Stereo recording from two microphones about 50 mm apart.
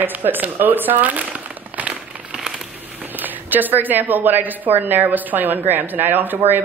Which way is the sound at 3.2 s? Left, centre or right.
Right.